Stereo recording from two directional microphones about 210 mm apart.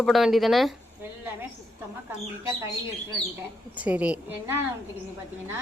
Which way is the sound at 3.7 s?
5° right (ahead or behind).